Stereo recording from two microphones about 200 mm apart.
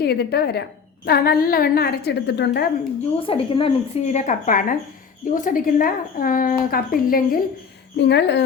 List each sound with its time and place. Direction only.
0.0 s a woman's voice: 55° left (ahead or behind)
3.2 s a woman's voice: 25° left (ahead or behind); by 7.3 s 45° left (ahead or behind)
7.9 s a woman's voice: 60° left (ahead or behind)